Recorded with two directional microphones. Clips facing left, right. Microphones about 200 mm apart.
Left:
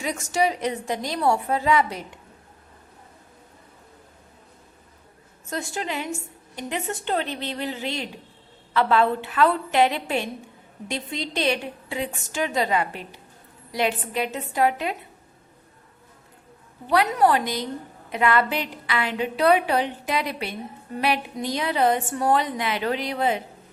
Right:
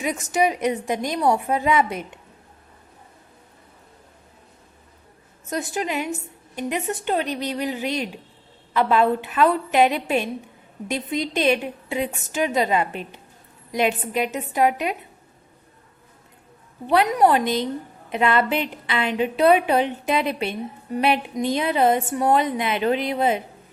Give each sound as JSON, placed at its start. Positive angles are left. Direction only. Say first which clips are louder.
{"t": 0.0, "sound": "a woman's voice", "louder": "right 2 dB", "side_deg": -20}
{"t": 5.5, "sound": "a woman's voice", "louder": "right 4 dB", "side_deg": -20}
{"t": 16.8, "sound": "a woman's voice", "louder": "right 2 dB", "side_deg": -20}